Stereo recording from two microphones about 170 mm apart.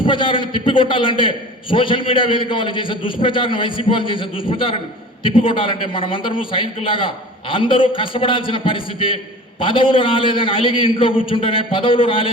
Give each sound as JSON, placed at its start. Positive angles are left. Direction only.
{"t": 0.0, "sound": "a man's voice", "side_deg": 30}